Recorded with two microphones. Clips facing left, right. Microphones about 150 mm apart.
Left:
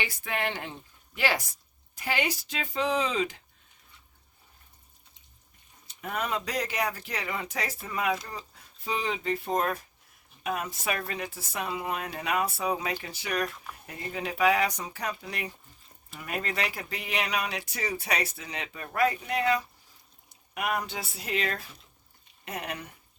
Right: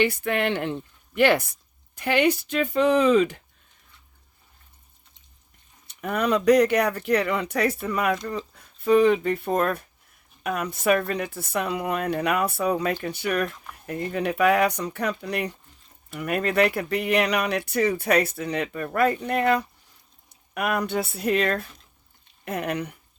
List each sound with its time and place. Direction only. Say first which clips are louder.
0.0 s speech: right 9 dB; 60° right (ahead or behind)
6.1 s speech: right 13 dB; 70° right (ahead or behind)
8.8 s speech: right 14 dB; 60° right (ahead or behind)